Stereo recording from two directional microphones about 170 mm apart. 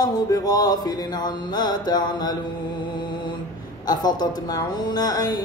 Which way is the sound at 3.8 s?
25° left (ahead or behind).